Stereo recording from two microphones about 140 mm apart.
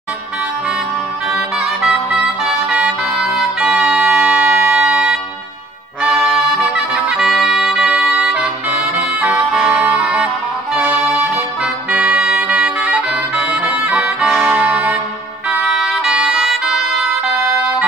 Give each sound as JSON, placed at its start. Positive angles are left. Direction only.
{"t": 1.3, "sound": "music", "side_deg": -5}
{"t": 6.1, "sound": "music", "side_deg": -5}